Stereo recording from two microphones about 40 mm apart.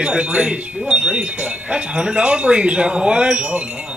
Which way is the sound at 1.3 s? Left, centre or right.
Right.